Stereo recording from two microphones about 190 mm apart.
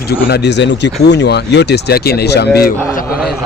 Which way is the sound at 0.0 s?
55° left (ahead or behind).